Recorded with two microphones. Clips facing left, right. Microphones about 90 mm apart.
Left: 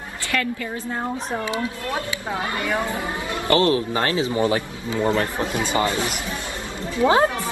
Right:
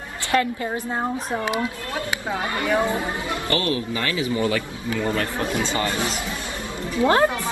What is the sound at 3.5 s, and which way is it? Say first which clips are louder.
A man's voice: left 7 dB; 30° left (ahead or behind).